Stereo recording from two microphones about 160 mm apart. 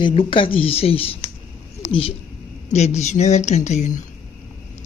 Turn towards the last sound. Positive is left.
turn(degrees=50)  # may be behind; listen again after turning